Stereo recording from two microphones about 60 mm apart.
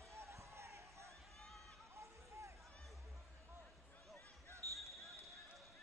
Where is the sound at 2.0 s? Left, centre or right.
Right.